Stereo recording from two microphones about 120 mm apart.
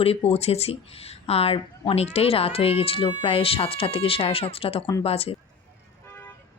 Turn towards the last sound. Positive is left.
turn(degrees=55)  # may be behind; listen again after turning